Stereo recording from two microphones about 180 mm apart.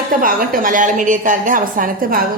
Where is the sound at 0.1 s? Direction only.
50° right (ahead or behind).